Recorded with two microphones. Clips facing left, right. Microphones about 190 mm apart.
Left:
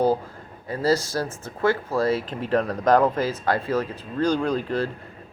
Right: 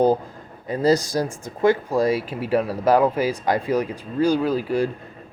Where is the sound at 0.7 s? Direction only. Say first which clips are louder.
Right 3 dB; 20° right (ahead or behind).